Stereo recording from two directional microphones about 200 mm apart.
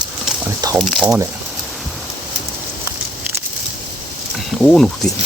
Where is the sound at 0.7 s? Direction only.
Centre (ahead or behind).